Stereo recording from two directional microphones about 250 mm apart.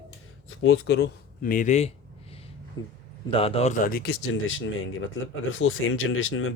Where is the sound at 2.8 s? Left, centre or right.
Centre.